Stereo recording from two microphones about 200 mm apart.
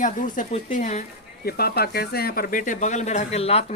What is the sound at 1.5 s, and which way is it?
Speech, 50° left (ahead or behind).